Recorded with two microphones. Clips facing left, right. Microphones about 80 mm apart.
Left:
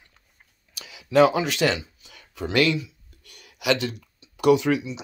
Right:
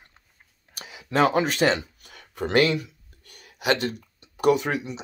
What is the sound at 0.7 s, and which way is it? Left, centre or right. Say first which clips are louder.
Speech: left 5 dB; right.